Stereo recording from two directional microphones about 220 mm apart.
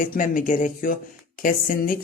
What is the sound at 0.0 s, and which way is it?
Speech, 35° left (ahead or behind).